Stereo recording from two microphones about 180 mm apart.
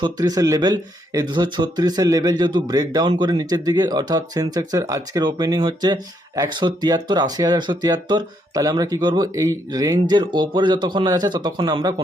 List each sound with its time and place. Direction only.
0.0 s speech: 20° right (ahead or behind)